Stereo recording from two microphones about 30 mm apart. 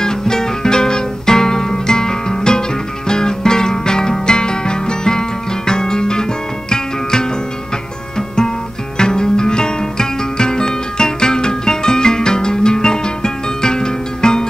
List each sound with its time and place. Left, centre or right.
0.0 s music: left
8.9 s music: left